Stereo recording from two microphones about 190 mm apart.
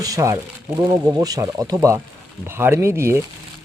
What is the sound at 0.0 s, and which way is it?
Speech, 15° right (ahead or behind).